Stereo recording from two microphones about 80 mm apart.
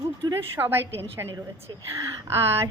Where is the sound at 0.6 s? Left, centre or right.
Right.